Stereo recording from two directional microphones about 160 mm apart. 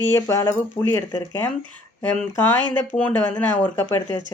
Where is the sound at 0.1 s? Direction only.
20° left (ahead or behind).